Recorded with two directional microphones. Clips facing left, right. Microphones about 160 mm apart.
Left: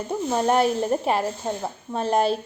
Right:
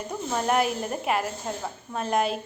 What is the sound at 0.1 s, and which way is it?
A woman's voice, 30° left (ahead or behind).